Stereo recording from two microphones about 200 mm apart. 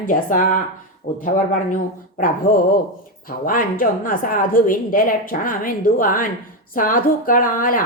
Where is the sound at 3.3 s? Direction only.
45° left (ahead or behind).